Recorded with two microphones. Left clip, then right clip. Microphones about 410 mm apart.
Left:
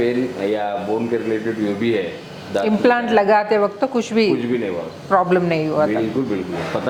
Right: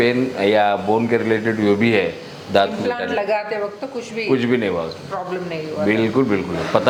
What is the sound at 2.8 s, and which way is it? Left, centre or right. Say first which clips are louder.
A woman's voice: left 6 dB; left.